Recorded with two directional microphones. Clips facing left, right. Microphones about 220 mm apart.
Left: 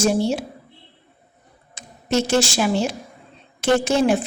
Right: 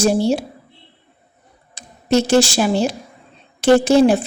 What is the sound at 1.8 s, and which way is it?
A woman's voice, 35° right (ahead or behind).